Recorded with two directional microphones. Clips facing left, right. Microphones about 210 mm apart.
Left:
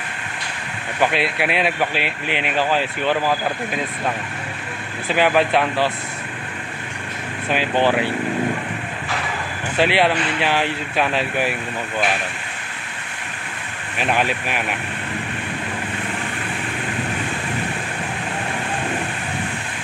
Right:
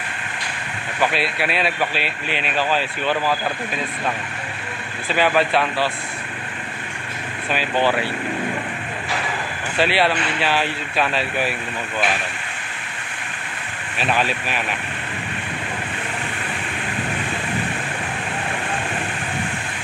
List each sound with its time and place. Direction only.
1.1 s speech: 15° left (ahead or behind)
5.1 s speech: 15° left (ahead or behind)
7.4 s speech: 15° left (ahead or behind)
9.8 s speech: 15° left (ahead or behind)
13.9 s speech: 15° left (ahead or behind)